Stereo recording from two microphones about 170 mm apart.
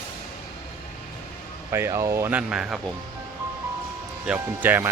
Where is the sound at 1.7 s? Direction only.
15° right (ahead or behind).